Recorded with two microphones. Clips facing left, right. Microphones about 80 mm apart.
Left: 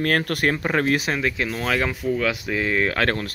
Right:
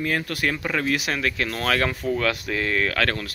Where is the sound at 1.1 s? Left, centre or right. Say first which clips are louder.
Left 1 dB; centre.